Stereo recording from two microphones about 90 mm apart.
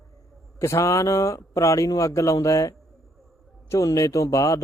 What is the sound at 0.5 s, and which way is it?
Speech, 35° left (ahead or behind).